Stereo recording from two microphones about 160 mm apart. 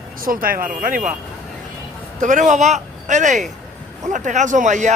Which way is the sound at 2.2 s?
50° right (ahead or behind).